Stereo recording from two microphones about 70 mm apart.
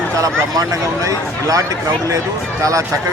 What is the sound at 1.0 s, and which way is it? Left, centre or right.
Speech, right.